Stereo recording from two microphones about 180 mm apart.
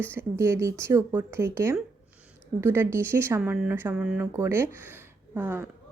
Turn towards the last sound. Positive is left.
turn(degrees=-10)  # may be behind; listen again after turning